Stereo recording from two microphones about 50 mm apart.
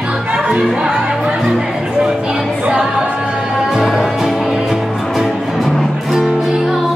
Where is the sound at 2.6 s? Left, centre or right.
Right.